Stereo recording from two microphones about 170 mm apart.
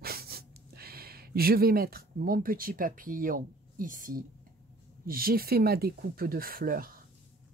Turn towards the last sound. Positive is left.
turn(degrees=-55)  # may be behind; listen again after turning